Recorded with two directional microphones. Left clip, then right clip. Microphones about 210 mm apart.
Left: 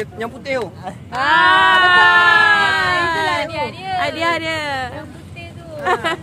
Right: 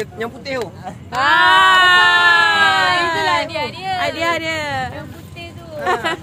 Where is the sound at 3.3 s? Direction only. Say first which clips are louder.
Right 2 dB; 35° right (ahead or behind).